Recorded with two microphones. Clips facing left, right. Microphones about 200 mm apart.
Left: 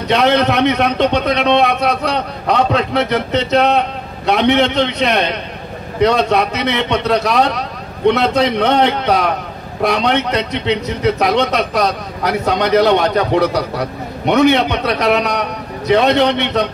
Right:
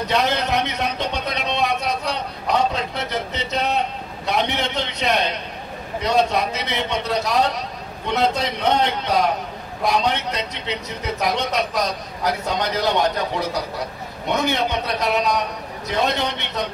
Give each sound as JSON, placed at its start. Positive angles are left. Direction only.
{"t": 0.1, "sound": "a man's voice", "side_deg": 70}